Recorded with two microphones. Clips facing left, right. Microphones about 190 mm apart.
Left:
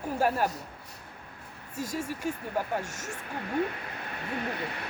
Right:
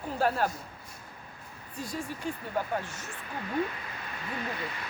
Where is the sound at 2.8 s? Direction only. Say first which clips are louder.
Left 3 dB; 45° left (ahead or behind).